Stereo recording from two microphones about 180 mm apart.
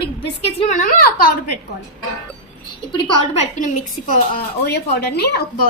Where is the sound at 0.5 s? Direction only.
40° left (ahead or behind).